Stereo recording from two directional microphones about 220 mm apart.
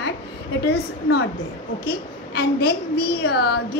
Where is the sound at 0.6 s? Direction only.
50° left (ahead or behind).